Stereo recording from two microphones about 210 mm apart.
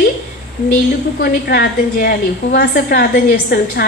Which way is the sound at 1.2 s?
45° left (ahead or behind).